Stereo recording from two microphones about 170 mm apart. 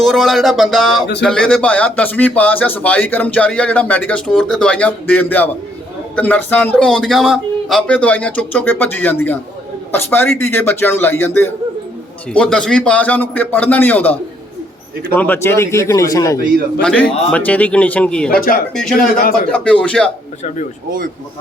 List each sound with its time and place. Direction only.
0.0 s speech: centre (ahead or behind); by 16.4 s 20° left (ahead or behind)
16.8 s speech: 10° left (ahead or behind)